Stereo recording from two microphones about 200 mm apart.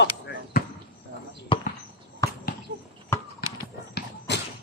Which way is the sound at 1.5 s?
25° left (ahead or behind).